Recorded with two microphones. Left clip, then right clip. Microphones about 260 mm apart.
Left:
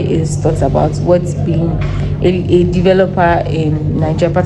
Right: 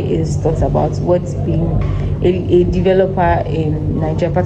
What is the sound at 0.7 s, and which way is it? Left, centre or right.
Speech, left.